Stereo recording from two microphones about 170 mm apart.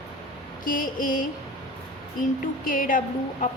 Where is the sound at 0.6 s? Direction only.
55° left (ahead or behind).